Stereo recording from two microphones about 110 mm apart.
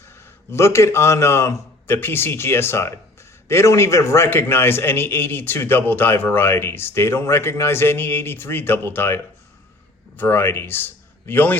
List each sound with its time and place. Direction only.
0.5 s a man's voice: 25° left (ahead or behind)